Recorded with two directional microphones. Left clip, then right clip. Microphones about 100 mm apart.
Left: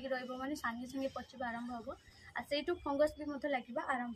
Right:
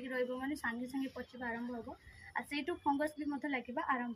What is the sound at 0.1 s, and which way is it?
Speech, 35° left (ahead or behind).